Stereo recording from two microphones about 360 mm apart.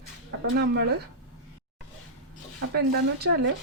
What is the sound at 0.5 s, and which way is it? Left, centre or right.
Speech, right.